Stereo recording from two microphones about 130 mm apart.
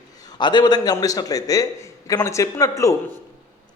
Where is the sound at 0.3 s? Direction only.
35° left (ahead or behind).